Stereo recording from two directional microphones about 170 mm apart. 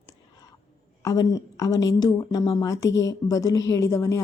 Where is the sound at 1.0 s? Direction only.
20° left (ahead or behind).